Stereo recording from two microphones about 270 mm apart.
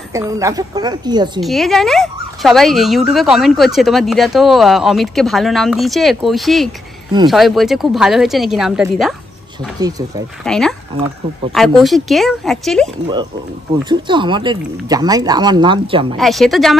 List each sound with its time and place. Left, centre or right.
0.1 s speech: centre
1.4 s speech: centre
9.8 s speech: centre
10.4 s speech: centre
13.8 s speech: centre
16.2 s speech: centre